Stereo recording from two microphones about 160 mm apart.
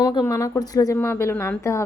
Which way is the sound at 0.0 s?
25° left (ahead or behind).